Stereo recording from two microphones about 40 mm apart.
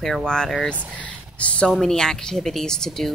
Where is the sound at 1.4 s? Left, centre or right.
Left.